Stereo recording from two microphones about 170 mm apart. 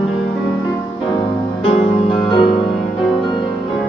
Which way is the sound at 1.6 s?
30° left (ahead or behind).